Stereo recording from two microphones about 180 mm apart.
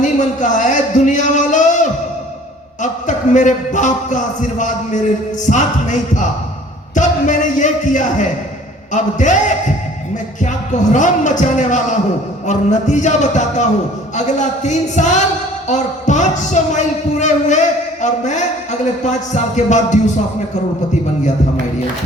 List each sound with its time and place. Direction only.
0.0 s music: 45° left (ahead or behind)
2.8 s a man's voice: 45° left (ahead or behind)
10.9 s a man's voice: 45° left (ahead or behind)